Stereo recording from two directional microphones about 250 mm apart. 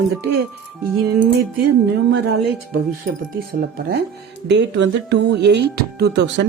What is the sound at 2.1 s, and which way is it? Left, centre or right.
Speech, right.